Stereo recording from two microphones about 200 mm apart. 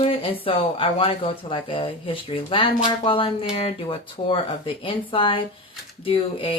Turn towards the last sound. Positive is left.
turn(degrees=25)  # may be behind; listen again after turning